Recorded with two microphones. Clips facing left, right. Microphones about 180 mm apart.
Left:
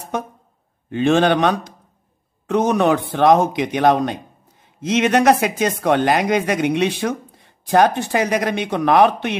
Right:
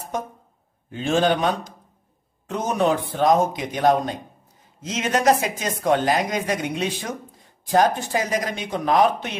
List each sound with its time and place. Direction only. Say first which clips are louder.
0.8 s speech: left 5 dB; 70° left (ahead or behind)